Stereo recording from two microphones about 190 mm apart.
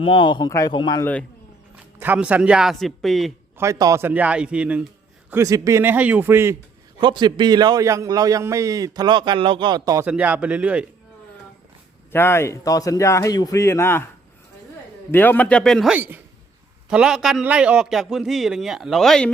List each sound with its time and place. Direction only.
0.0 s speech: 25° left (ahead or behind)
2.0 s a man's voice: 5° right (ahead or behind)
3.6 s a man's voice: 15° right (ahead or behind)
5.3 s a man's voice: 15° right (ahead or behind)
7.0 s a man's voice: 25° right (ahead or behind)
10.1 s a man's voice: 5° right (ahead or behind)
12.1 s a man's voice: 10° left (ahead or behind)
15.1 s a man's voice: 10° left (ahead or behind)